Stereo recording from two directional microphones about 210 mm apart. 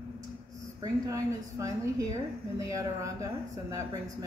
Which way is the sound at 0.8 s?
15° right (ahead or behind).